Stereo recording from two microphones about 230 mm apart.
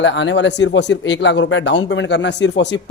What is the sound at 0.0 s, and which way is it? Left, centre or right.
Speech, left.